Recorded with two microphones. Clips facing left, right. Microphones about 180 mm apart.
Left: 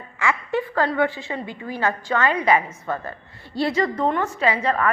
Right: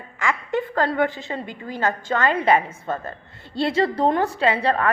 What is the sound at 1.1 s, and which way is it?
Speech, 20° right (ahead or behind).